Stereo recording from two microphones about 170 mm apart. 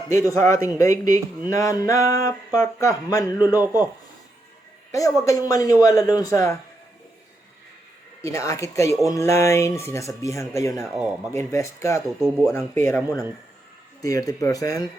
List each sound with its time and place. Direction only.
0.3 s speech: 15° left (ahead or behind)
4.9 s a woman's voice: 20° left (ahead or behind)
8.2 s speech: 20° left (ahead or behind)
10.8 s speech: 5° right (ahead or behind)
11.3 s speech: 15° left (ahead or behind)